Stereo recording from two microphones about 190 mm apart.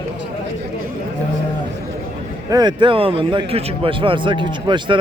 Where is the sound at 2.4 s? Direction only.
20° right (ahead or behind).